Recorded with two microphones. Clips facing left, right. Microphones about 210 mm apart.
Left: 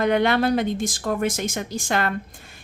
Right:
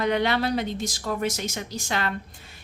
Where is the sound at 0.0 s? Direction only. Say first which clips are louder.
Left 4 dB; 50° left (ahead or behind).